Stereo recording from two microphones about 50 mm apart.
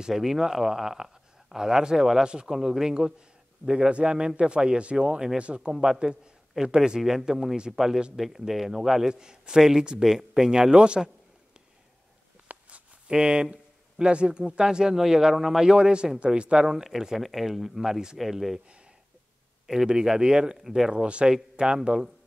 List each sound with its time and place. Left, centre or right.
0.1 s speech: centre
7.0 s speech: centre
12.4 s a sound: right
13.1 s speech: centre
19.6 s speech: centre
20.9 s speech: right